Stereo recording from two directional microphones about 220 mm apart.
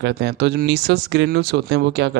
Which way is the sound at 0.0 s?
50° right (ahead or behind).